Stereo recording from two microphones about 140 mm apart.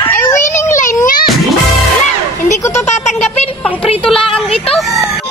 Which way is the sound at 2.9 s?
55° left (ahead or behind).